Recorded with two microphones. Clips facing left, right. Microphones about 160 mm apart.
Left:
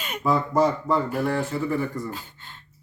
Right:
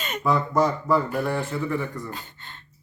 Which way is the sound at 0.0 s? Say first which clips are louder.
Even; 10° left (ahead or behind).